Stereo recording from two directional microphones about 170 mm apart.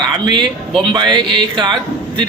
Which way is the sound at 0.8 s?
25° right (ahead or behind).